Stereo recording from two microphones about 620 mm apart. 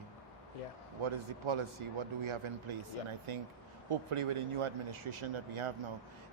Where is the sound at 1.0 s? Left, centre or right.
Right.